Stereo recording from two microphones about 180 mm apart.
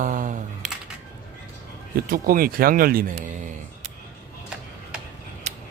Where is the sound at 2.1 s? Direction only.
55° right (ahead or behind).